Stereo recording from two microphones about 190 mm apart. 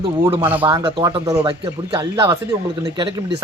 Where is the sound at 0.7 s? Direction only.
25° right (ahead or behind).